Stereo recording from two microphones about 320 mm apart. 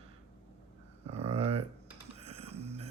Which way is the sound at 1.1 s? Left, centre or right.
Centre.